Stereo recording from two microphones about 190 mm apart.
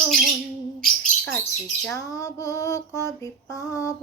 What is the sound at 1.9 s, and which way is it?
Female singing, 15° left (ahead or behind).